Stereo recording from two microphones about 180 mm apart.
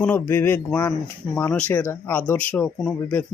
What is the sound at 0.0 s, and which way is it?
Speech, 10° left (ahead or behind).